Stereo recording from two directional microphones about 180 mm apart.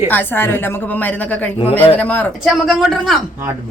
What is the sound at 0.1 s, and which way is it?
A woman's voice, 10° left (ahead or behind).